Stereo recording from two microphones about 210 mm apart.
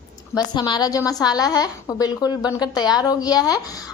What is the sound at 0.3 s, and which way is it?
A woman's voice, 20° left (ahead or behind).